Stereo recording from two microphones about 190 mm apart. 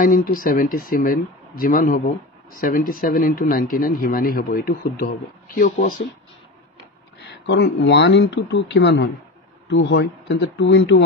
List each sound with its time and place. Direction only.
0.0 s speech: 45° left (ahead or behind)
7.2 s speech: 60° left (ahead or behind)